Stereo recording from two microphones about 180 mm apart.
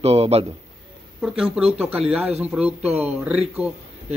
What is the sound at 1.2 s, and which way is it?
Speech, 5° right (ahead or behind).